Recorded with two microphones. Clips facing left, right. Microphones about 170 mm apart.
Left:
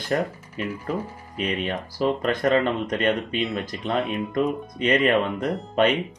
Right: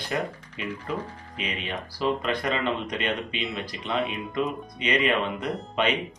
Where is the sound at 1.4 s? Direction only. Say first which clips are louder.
Left 6 dB; 45° left (ahead or behind).